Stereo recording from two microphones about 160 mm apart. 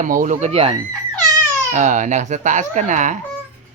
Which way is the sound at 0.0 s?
55° right (ahead or behind).